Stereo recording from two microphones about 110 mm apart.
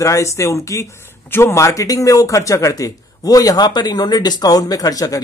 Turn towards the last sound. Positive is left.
turn(degrees=35)  # may be behind; listen again after turning